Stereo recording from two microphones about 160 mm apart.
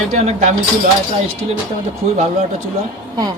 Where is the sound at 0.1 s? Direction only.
50° right (ahead or behind).